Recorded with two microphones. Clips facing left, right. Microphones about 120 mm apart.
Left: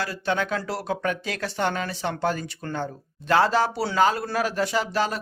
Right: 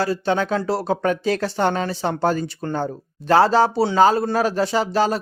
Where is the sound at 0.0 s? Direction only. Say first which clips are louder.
Right 6 dB; 30° right (ahead or behind).